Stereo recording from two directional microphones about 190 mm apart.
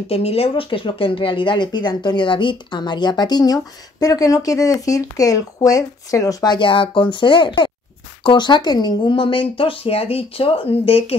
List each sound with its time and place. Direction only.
0.1 s speech: 30° left (ahead or behind)